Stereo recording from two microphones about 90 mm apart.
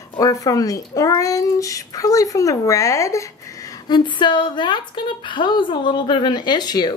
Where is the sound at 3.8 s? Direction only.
60° left (ahead or behind).